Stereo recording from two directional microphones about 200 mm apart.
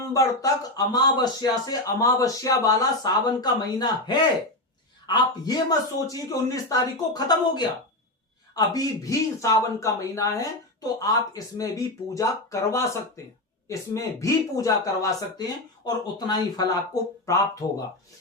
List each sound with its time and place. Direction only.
0.0 s a man's voice: 15° left (ahead or behind)